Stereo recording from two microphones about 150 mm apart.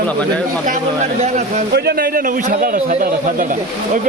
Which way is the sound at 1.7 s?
90° right.